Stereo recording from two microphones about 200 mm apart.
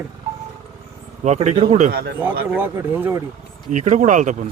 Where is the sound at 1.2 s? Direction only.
35° right (ahead or behind).